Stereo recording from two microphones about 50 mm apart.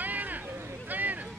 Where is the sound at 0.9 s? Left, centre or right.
Right.